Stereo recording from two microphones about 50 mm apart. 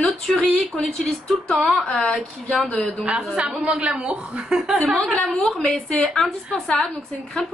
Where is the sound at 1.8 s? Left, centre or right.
Centre.